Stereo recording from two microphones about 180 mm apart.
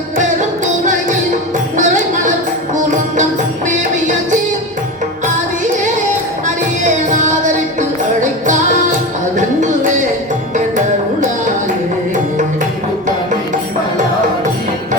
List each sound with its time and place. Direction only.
1.7 s music: 45° right (ahead or behind)
3.7 s music: 45° right (ahead or behind)
6.8 s music: 45° right (ahead or behind)
9.4 s a sound: 45° right (ahead or behind)